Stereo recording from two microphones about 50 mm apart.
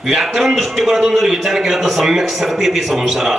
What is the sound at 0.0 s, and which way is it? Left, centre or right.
A man's voice, centre.